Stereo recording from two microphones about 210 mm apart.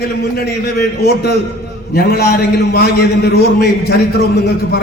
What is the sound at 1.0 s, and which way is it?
A man's voice, 50° left (ahead or behind).